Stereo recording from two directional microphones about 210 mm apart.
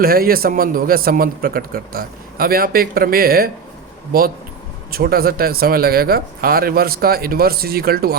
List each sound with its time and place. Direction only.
0.0 s a man's voice: 45° right (ahead or behind)
4.9 s a man's voice: 45° right (ahead or behind)